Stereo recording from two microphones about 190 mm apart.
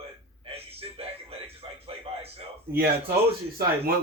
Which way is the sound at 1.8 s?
30° right (ahead or behind).